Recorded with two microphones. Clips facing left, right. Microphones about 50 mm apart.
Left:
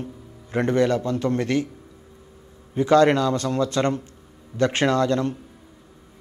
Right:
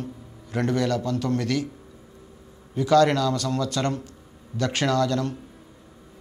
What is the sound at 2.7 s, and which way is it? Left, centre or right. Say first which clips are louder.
A man's voice: left 2 dB; left.